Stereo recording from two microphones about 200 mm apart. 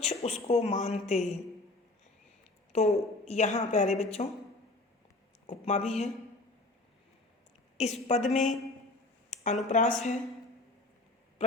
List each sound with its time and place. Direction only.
0.0 s a woman's voice: 30° left (ahead or behind)
2.7 s a woman's voice: 30° left (ahead or behind)
5.5 s a woman's voice: 35° left (ahead or behind)
7.8 s a woman's voice: 35° left (ahead or behind)
9.3 s a sound: 40° left (ahead or behind)
9.6 s a woman's voice: 35° left (ahead or behind)